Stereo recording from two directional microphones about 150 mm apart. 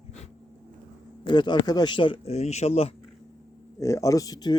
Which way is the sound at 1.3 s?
30° left (ahead or behind).